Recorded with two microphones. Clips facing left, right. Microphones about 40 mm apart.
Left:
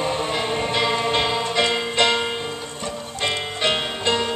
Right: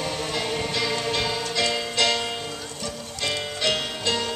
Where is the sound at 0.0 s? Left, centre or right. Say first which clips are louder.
Left 5 dB; left.